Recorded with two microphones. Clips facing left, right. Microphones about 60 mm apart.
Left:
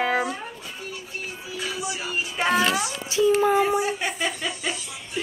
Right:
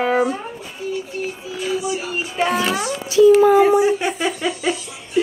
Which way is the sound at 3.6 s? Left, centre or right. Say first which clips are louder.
Right 9 dB; right.